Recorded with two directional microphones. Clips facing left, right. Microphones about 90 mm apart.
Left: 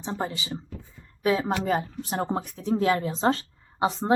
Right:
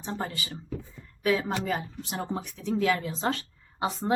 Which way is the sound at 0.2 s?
20° left (ahead or behind).